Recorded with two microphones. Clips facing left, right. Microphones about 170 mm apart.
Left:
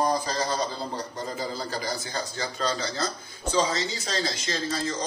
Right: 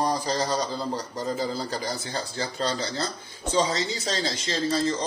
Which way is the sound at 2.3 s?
35° right (ahead or behind).